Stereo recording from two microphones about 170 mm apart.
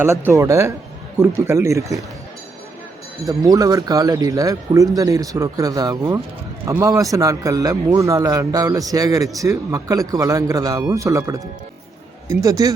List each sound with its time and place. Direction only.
0.0 s speech: 15° right (ahead or behind)
3.2 s a man's voice: 20° right (ahead or behind)